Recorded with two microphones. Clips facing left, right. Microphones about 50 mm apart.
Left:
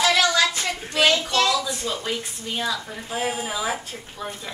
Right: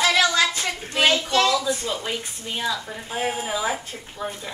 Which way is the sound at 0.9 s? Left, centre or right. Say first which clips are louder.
Even; centre.